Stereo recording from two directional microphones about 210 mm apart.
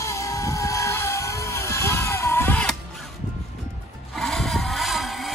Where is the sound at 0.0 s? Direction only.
15° left (ahead or behind).